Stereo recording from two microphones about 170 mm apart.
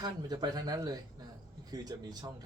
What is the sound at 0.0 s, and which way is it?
A man's voice, 25° right (ahead or behind).